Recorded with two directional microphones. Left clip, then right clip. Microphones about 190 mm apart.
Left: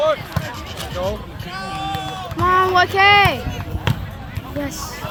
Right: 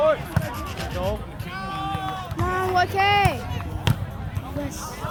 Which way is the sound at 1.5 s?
45° left (ahead or behind).